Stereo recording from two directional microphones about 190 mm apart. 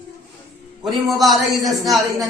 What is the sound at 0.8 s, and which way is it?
A man's voice, centre (ahead or behind).